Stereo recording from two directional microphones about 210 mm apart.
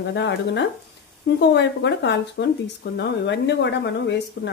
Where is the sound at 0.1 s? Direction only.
55° left (ahead or behind).